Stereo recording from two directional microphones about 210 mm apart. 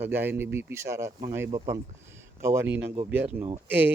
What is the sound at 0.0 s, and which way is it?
A woman's voice, 10° right (ahead or behind).